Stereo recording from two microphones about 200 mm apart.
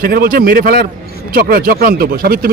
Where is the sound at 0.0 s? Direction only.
45° right (ahead or behind).